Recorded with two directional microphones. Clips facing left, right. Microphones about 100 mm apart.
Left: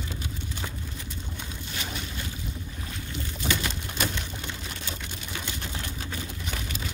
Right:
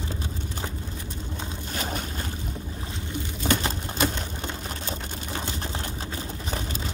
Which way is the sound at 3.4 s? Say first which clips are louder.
Right 4 dB; 35° right (ahead or behind).